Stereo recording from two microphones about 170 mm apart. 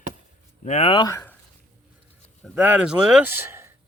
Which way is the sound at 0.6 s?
40° left (ahead or behind).